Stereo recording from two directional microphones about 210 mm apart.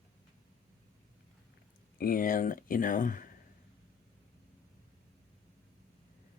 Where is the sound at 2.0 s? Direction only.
40° left (ahead or behind).